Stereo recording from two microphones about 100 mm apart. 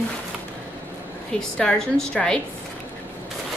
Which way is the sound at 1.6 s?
5° left (ahead or behind).